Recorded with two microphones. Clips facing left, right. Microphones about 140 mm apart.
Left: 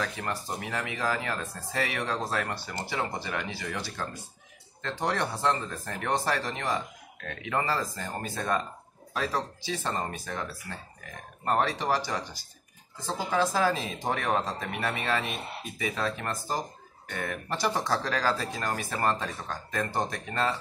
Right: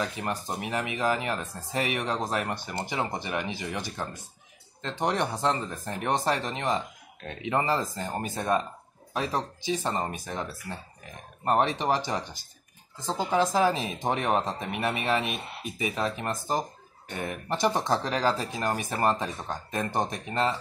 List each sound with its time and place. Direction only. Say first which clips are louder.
0.0 s speech: right 2 dB; 20° right (ahead or behind)